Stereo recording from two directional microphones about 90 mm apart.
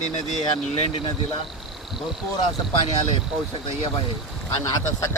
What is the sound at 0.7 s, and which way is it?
Speech, 90° left.